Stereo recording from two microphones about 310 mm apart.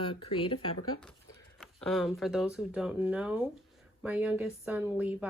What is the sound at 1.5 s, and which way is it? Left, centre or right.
Speech, centre.